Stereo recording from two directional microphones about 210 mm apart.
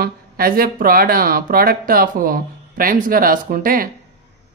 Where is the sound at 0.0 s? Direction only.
45° right (ahead or behind).